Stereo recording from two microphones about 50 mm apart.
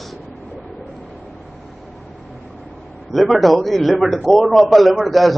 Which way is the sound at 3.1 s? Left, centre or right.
Centre.